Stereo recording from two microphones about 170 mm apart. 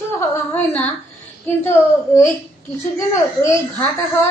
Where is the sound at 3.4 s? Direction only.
15° left (ahead or behind).